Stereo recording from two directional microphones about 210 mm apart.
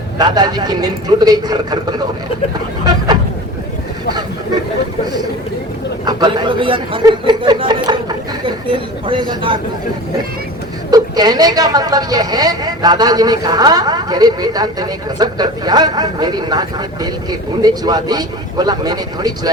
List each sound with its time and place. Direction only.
0.2 s a woman's voice: 20° right (ahead or behind)
6.1 s a woman's voice: 20° right (ahead or behind)
10.9 s a woman's voice: 20° right (ahead or behind)